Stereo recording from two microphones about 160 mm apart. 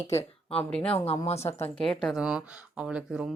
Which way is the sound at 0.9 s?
40° left (ahead or behind).